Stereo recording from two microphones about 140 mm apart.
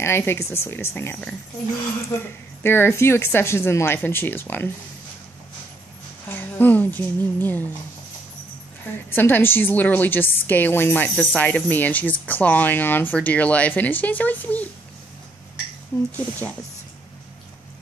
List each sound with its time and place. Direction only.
0.0 s a woman's voice: 15° left (ahead or behind)
6.2 s speech: 15° left (ahead or behind)
8.9 s a woman's voice: 15° left (ahead or behind)
15.9 s a woman's voice: 15° left (ahead or behind)